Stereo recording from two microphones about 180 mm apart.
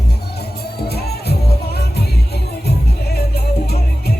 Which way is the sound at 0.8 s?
60° left (ahead or behind).